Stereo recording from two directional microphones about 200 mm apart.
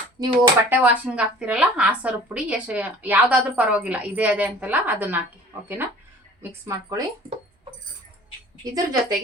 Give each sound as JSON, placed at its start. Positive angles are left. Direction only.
{"t": 0.2, "sound": "a woman's voice", "side_deg": -20}
{"t": 0.7, "sound": "a woman's voice", "side_deg": -10}
{"t": 8.7, "sound": "a woman's voice", "side_deg": -20}